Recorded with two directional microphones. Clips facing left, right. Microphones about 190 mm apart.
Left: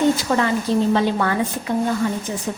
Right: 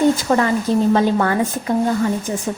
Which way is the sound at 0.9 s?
40° right (ahead or behind).